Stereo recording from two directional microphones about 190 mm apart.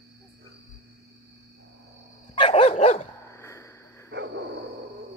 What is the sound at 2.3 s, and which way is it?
Dog, 30° left (ahead or behind).